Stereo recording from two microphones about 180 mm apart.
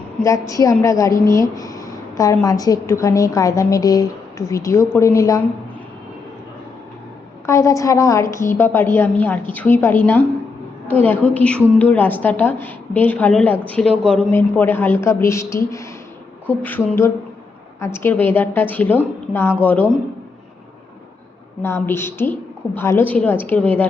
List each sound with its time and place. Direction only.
0.2 s a woman's voice: 15° left (ahead or behind)
7.4 s a woman's voice: 15° left (ahead or behind)
21.6 s a woman's voice: 15° left (ahead or behind)